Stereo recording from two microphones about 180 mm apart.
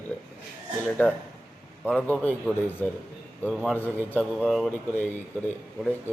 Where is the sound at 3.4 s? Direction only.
Centre (ahead or behind).